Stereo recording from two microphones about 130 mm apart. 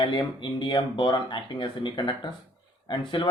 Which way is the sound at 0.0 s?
35° left (ahead or behind).